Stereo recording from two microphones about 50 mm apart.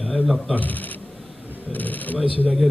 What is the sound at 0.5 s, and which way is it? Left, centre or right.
Speech, left.